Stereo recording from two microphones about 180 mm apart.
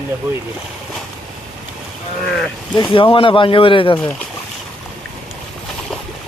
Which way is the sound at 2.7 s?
25° left (ahead or behind).